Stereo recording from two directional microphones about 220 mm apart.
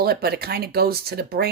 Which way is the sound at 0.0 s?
45° right (ahead or behind).